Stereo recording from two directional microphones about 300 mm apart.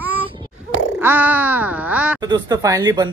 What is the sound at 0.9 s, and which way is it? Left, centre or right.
Speech, centre.